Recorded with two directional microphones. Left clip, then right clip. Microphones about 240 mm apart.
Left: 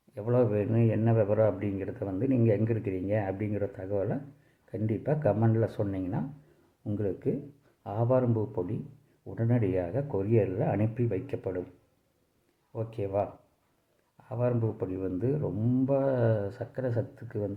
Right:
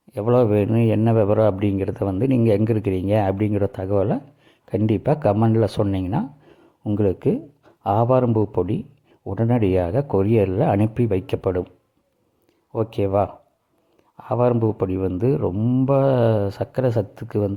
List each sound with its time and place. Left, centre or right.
0.1 s a man's voice: right
12.7 s a man's voice: right